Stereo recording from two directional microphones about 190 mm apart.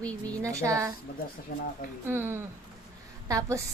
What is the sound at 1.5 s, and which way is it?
Speech, 50° left (ahead or behind).